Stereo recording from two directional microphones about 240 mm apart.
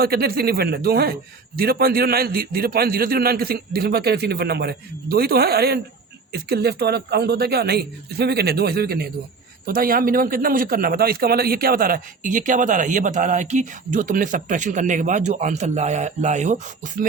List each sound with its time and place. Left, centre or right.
0.0 s a man's voice: right